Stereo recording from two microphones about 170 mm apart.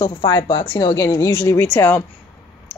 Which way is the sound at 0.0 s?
25° left (ahead or behind).